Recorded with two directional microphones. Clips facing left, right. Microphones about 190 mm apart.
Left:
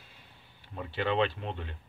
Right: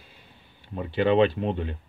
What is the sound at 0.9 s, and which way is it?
Speech, 5° right (ahead or behind).